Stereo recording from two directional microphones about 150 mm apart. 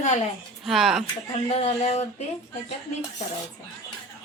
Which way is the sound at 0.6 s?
Centre (ahead or behind).